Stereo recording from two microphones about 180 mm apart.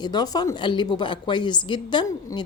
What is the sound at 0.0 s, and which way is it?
Speech, 25° left (ahead or behind).